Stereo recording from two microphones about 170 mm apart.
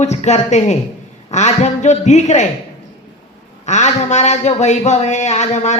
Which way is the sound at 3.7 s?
45° left (ahead or behind).